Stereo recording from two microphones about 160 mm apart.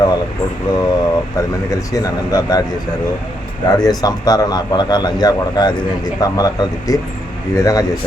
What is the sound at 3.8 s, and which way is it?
A man's voice, 25° left (ahead or behind).